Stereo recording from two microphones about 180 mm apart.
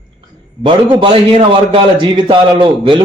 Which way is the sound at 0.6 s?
30° right (ahead or behind).